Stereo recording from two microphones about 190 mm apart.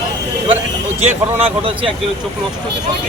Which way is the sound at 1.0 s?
30° right (ahead or behind).